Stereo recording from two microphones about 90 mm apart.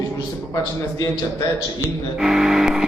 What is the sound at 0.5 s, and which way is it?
Speech, 35° left (ahead or behind).